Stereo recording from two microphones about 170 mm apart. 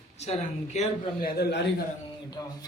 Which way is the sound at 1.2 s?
65° left (ahead or behind).